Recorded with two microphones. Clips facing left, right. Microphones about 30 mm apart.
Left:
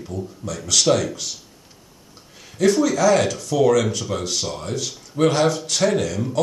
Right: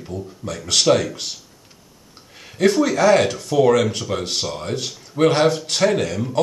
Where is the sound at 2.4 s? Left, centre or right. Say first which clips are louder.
Right 1 dB; right.